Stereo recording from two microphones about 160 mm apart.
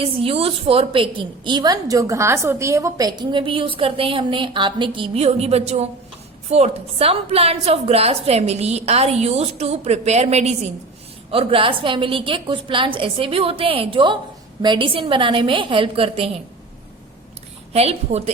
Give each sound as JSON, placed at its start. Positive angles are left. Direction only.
{"t": 0.0, "sound": "a woman's voice", "side_deg": -35}
{"t": 17.7, "sound": "a woman's voice", "side_deg": -40}